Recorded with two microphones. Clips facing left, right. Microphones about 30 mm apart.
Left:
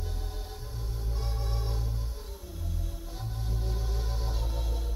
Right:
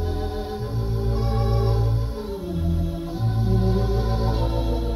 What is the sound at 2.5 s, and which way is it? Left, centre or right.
Music, right.